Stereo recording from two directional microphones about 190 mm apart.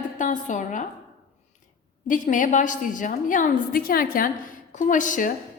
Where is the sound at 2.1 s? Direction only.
45° left (ahead or behind).